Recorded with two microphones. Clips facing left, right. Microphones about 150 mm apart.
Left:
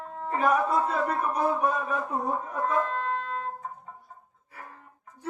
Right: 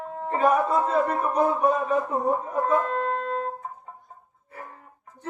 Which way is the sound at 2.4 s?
35° right (ahead or behind).